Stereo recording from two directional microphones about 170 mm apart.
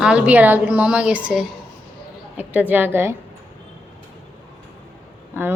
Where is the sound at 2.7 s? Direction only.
10° right (ahead or behind).